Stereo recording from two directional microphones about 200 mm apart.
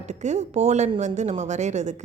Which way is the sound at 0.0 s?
35° right (ahead or behind).